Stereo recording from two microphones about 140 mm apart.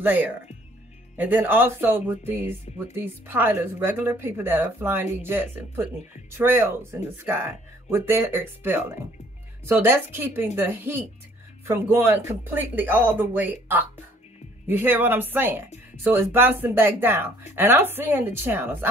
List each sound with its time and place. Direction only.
0.0 s speech: 15° right (ahead or behind)